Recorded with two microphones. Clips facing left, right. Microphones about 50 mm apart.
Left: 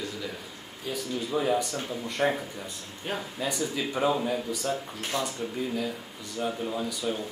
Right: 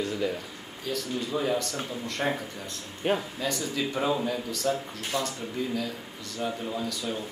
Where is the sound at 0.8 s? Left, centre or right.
Centre.